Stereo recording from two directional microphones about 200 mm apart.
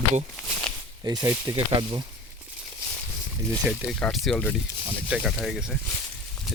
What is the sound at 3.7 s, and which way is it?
Speech, centre (ahead or behind).